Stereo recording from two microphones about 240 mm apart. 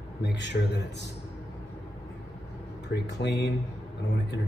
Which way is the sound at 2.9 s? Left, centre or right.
Left.